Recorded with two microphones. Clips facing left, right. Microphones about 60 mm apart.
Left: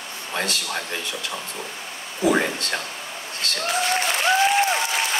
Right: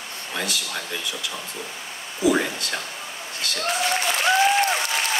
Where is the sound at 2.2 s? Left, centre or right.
Left.